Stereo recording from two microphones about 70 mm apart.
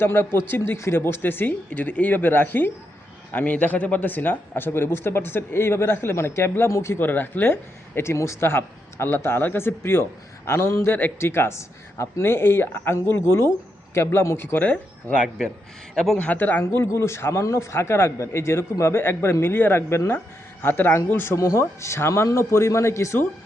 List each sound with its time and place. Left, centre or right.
0.0 s speech: left
7.0 s speech: left
14.6 s speech: left
16.1 s speech: left
16.6 s speech: left
21.3 s a man's voice: left